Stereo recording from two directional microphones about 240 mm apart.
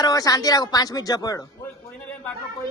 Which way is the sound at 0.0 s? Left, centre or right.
Centre.